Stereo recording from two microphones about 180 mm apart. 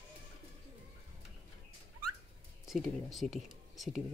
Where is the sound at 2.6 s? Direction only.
Centre (ahead or behind).